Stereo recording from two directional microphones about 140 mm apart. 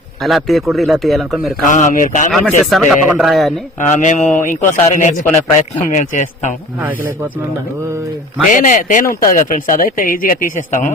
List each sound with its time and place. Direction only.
0.2 s a man's voice: centre (ahead or behind)
1.6 s a man's voice: 65° left (ahead or behind)
2.3 s a man's voice: 5° left (ahead or behind)
3.8 s a man's voice: 60° left (ahead or behind)
6.7 s speech: 10° right (ahead or behind)
8.4 s speech: 65° left (ahead or behind)